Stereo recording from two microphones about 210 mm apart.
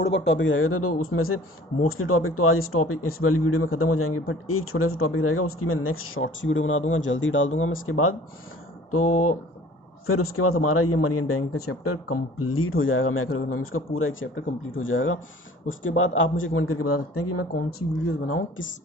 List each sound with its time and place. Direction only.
0.0 s a man's voice: 55° left (ahead or behind); by 17.4 s 90° left
18.3 s a man's voice: 65° left (ahead or behind)